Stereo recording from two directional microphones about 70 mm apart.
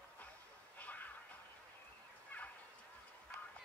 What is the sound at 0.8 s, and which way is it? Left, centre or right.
Music, left.